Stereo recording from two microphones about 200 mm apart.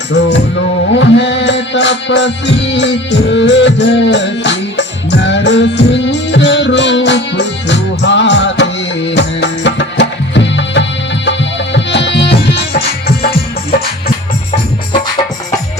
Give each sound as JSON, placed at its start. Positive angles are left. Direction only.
{"t": 0.1, "sound": "music", "side_deg": 60}
{"t": 13.7, "sound": "music", "side_deg": 50}